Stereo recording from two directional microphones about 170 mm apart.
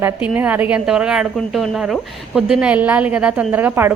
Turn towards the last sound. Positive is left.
turn(degrees=-10)  # may be behind; listen again after turning